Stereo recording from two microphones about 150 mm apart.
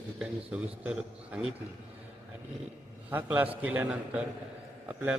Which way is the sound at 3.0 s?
10° right (ahead or behind).